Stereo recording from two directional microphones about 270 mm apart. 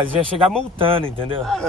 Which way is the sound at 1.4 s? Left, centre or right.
Centre.